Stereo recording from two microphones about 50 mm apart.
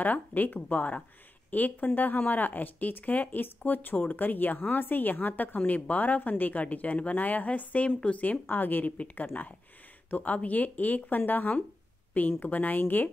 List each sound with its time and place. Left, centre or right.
0.0 s speech: left